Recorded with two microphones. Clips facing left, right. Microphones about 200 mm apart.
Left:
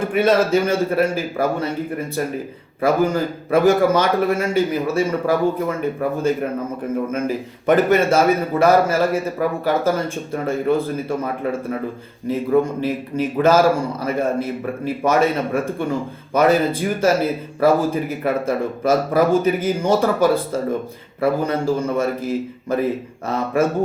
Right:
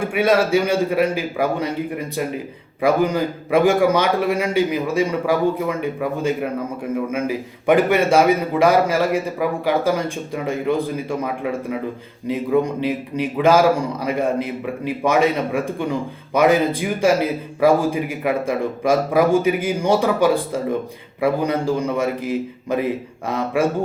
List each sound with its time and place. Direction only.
0.0 s a man's voice: 10° right (ahead or behind)
12.8 s a man's voice: 15° right (ahead or behind)